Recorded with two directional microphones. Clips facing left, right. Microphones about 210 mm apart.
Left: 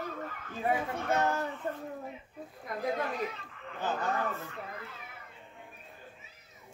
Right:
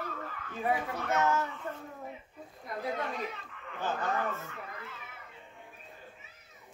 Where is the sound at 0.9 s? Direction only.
30° left (ahead or behind).